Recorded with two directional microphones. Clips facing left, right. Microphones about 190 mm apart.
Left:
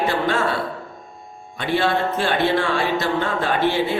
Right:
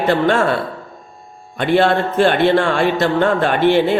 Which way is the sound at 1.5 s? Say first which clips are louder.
Right 6 dB; 55° right (ahead or behind).